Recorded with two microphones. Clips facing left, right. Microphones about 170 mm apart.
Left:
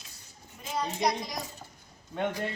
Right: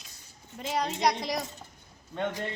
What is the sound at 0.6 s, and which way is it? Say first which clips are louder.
Speech: right 2 dB; 80° right.